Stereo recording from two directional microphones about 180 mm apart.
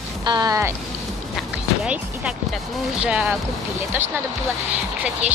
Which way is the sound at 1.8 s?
5° right (ahead or behind).